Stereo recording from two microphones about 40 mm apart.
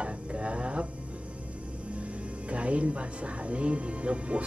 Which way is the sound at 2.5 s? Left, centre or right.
Right.